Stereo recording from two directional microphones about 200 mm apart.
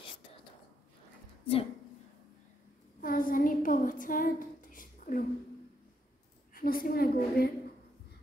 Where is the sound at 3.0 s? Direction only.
45° left (ahead or behind).